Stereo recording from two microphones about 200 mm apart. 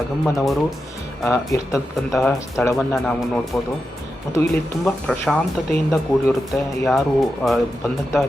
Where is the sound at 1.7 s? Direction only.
Centre (ahead or behind).